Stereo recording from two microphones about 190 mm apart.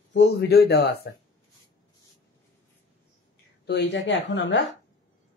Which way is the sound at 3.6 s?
65° left (ahead or behind).